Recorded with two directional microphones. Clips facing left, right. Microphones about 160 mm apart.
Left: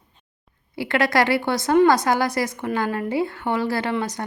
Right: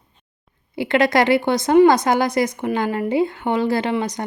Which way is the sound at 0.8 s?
20° right (ahead or behind).